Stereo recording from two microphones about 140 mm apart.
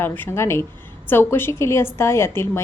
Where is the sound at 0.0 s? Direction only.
15° left (ahead or behind).